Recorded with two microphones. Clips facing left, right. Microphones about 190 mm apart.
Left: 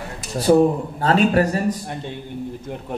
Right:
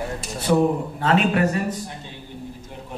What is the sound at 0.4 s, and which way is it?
A man's voice, 35° left (ahead or behind).